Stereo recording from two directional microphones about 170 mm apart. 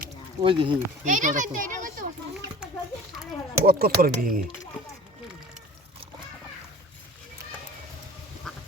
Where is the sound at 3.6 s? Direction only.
65° right (ahead or behind).